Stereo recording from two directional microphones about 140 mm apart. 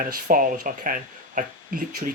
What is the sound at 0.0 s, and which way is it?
Speech, 75° right (ahead or behind).